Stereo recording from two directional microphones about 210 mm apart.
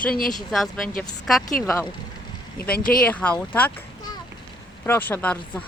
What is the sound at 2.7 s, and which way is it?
Speech, 45° left (ahead or behind).